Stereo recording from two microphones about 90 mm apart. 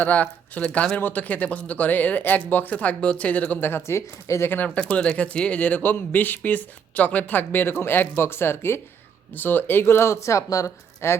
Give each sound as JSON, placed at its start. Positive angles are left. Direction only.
{"t": 0.0, "sound": "speech", "side_deg": 15}